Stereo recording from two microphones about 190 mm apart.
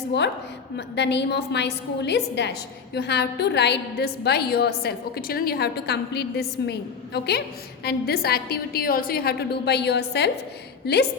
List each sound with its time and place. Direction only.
0.8 s a woman's voice: 65° left (ahead or behind)